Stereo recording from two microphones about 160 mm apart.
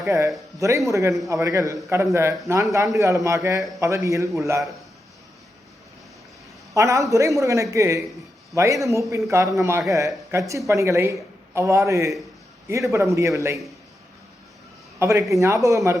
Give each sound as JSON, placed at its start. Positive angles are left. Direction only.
{"t": 0.0, "sound": "a man's voice", "side_deg": -20}
{"t": 6.7, "sound": "speech", "side_deg": -20}
{"t": 14.9, "sound": "speech", "side_deg": -15}